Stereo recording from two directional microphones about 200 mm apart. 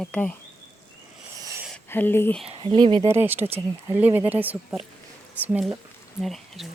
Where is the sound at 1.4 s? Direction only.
15° right (ahead or behind).